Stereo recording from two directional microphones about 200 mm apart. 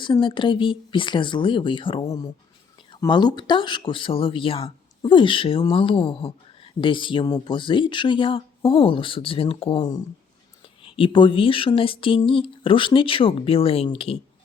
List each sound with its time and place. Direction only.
0.0 s speech: 25° left (ahead or behind)